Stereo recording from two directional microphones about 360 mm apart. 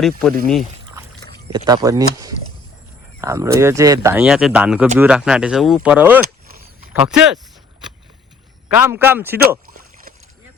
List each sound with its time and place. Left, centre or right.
0.4 s speech: centre
1.5 s speech: centre
6.2 s a sound: right
6.9 s speech: centre
8.7 s speech: centre